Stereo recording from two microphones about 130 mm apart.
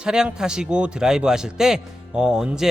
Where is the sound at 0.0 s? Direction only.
5° right (ahead or behind).